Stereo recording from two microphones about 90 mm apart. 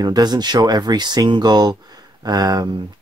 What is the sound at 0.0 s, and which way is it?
Speech, 50° right (ahead or behind).